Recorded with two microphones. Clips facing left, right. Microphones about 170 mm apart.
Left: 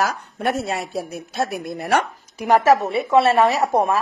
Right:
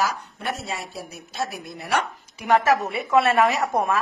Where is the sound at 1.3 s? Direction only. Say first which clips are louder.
Left 6 dB; 55° left (ahead or behind).